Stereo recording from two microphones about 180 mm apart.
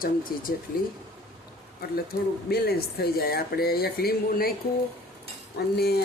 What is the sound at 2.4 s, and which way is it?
Speech, 60° left (ahead or behind).